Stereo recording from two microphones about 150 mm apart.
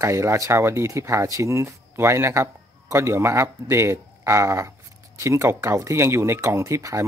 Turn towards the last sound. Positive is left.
turn(degrees=-20)  # may be behind; listen again after turning